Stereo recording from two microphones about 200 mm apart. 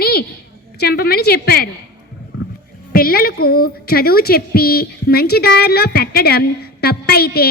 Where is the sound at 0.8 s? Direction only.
50° left (ahead or behind).